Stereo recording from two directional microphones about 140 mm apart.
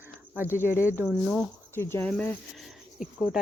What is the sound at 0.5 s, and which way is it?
Cricket, 15° right (ahead or behind).